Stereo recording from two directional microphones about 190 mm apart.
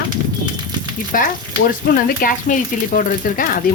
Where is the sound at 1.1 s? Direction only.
50° left (ahead or behind).